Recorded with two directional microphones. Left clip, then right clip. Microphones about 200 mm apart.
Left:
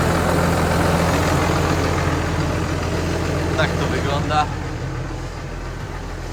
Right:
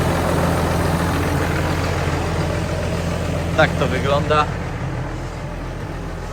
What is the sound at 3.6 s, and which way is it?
Speech, centre (ahead or behind).